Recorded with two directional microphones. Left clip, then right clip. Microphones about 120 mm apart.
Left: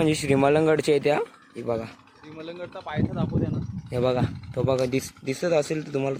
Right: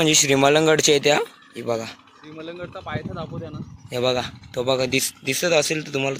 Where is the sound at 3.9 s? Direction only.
15° left (ahead or behind).